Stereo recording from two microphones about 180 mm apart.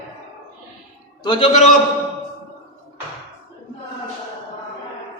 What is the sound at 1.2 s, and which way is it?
Speech, 25° left (ahead or behind).